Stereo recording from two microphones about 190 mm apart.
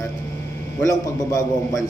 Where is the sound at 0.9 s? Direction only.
15° left (ahead or behind).